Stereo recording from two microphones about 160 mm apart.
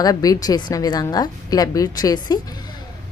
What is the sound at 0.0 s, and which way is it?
Speech, 25° left (ahead or behind).